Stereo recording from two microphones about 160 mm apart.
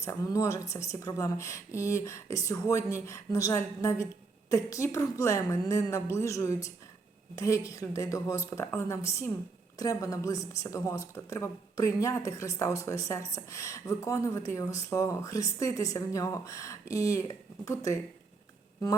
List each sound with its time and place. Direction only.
0.0 s speech: 20° left (ahead or behind)